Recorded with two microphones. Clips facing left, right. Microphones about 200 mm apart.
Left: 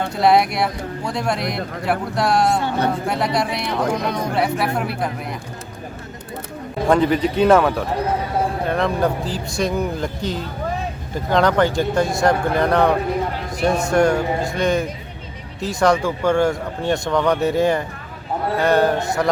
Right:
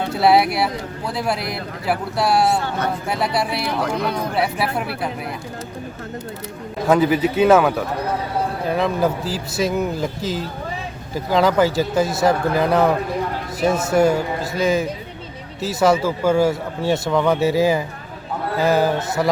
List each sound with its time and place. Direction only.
0.1 s speech: 5° right (ahead or behind)
6.8 s speech: 5° right (ahead or behind)